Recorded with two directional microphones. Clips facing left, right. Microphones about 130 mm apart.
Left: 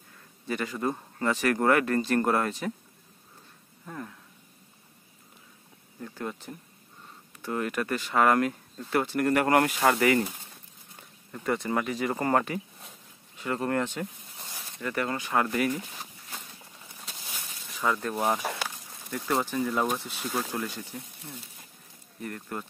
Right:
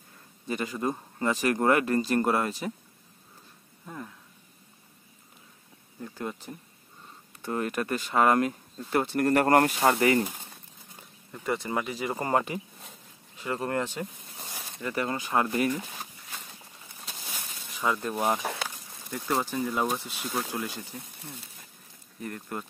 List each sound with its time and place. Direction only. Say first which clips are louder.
0.5 s speech: even; 20° right (ahead or behind)
3.8 s speech: left 1 dB; 5° right (ahead or behind)
5.9 s speech: even; 15° right (ahead or behind)
7.4 s speech: even; 30° right (ahead or behind)
9.2 s speech: right 2 dB; 40° right (ahead or behind)
9.8 s speech: even; 25° right (ahead or behind)
11.3 s speech: left 2 dB; 5° right (ahead or behind); by 13.8 s 20° right (ahead or behind)
14.4 s a sound: even; 15° right (ahead or behind)
14.9 s speech: even; 20° right (ahead or behind)
15.5 s speech: right 1 dB; 30° right (ahead or behind)
18.1 s speech: even; centre (ahead or behind)
19.2 s speech: left 1 dB; 15° right (ahead or behind)
22.2 s speech: even; 25° right (ahead or behind)